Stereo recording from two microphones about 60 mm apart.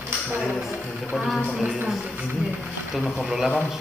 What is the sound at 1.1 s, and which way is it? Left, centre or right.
Speech, centre.